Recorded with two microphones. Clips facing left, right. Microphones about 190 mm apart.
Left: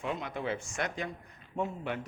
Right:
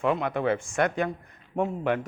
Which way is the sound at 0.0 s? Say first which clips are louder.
Right 10 dB; 60° right (ahead or behind).